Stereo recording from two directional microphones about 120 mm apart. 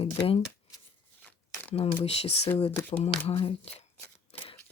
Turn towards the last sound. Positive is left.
turn(degrees=55)  # may be behind; listen again after turning